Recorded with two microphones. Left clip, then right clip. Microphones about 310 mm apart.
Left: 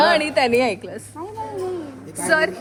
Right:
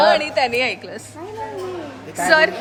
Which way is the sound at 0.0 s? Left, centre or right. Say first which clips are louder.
Right 1 dB; left.